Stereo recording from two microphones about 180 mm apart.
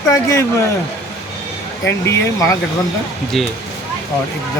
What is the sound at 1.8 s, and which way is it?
Speech, 15° left (ahead or behind).